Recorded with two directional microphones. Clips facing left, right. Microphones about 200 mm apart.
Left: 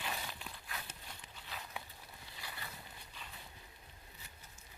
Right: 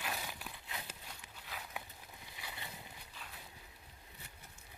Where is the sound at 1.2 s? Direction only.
10° right (ahead or behind).